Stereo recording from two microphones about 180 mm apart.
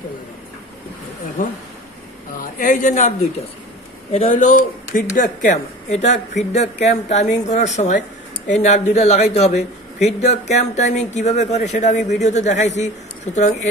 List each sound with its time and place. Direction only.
1.4 s speech: 45° left (ahead or behind)
4.1 s speech: 40° left (ahead or behind)